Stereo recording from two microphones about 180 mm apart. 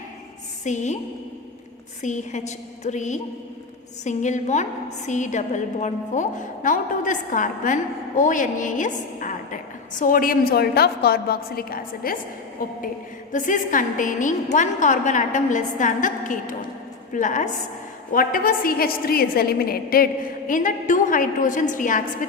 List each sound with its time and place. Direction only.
0.6 s a woman's voice: 40° left (ahead or behind)
2.0 s a woman's voice: 40° left (ahead or behind)
13.3 s a woman's voice: 45° left (ahead or behind)